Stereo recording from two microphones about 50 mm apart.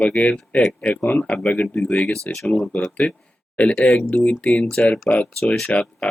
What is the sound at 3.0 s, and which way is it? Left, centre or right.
Speech, left.